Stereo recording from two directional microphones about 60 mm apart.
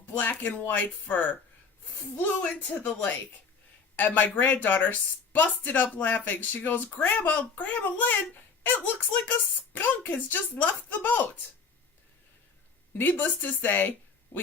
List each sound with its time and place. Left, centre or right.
0.0 s speech: left
13.0 s speech: left